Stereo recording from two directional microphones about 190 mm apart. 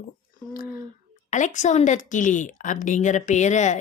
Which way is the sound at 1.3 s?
40° left (ahead or behind).